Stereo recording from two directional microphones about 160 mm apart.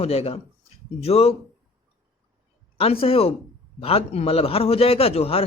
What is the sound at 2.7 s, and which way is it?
A man's voice, 35° left (ahead or behind).